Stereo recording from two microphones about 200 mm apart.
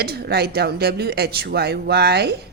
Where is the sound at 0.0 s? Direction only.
50° right (ahead or behind).